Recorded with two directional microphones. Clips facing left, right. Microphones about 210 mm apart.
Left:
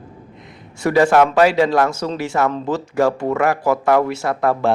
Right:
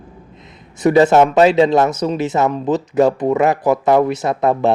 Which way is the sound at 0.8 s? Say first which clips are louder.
Right 3 dB; 20° right (ahead or behind).